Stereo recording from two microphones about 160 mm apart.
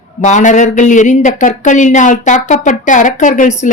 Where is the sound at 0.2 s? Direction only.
50° left (ahead or behind).